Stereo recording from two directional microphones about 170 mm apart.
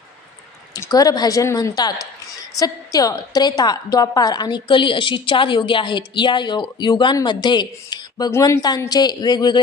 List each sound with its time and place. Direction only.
0.7 s a woman's voice: 20° left (ahead or behind)